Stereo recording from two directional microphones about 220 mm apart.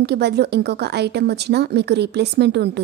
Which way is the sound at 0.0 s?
50° right (ahead or behind).